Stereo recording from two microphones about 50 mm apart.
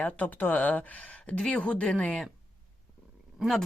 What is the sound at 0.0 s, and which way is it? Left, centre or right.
Speech, left.